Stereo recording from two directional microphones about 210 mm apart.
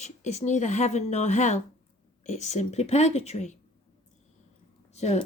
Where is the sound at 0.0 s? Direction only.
30° left (ahead or behind).